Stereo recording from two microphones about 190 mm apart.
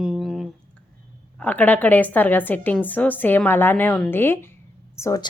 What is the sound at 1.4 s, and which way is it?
A woman's voice, 10° left (ahead or behind).